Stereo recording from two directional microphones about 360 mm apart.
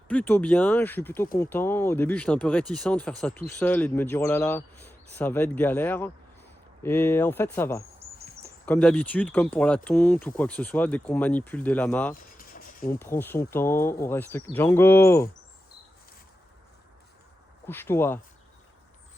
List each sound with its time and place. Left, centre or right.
0.1 s speech: centre
12.1 s a sound: left
13.0 s speech: centre
17.7 s speech: centre